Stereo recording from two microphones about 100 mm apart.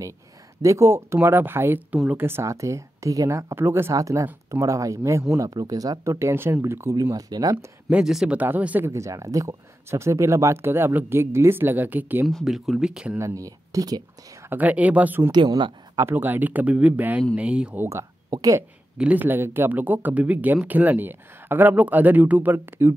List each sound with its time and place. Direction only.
0.6 s speech: 30° right (ahead or behind)
6.1 s speech: 25° right (ahead or behind)
7.5 s speech: 10° right (ahead or behind)
8.4 s speech: 15° right (ahead or behind)
8.9 s speech: 35° right (ahead or behind)
12.3 s speech: centre (ahead or behind)
13.2 s speech: 35° right (ahead or behind)
14.5 s speech: 15° right (ahead or behind)
15.3 s speech: 50° right (ahead or behind)
16.0 s speech: 20° right (ahead or behind)
17.8 s speech: 35° right (ahead or behind)
18.9 s speech: 15° right (ahead or behind)